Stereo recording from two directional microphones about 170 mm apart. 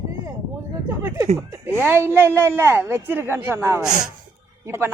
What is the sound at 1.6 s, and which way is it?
A woman's voice, 15° right (ahead or behind).